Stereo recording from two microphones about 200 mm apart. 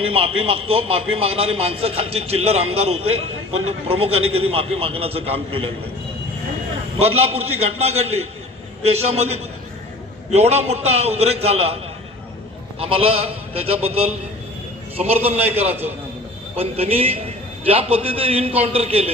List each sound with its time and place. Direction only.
0.0 s a man's voice: 30° right (ahead or behind)
7.3 s a man's voice: 30° right (ahead or behind)
12.8 s a man's voice: 30° right (ahead or behind)